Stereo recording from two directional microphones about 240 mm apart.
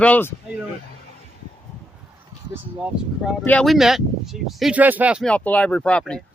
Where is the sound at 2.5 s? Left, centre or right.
Centre.